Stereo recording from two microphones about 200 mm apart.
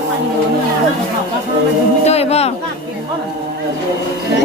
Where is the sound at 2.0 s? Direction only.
30° left (ahead or behind).